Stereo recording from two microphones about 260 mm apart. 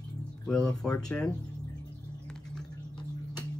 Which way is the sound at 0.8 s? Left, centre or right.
Centre.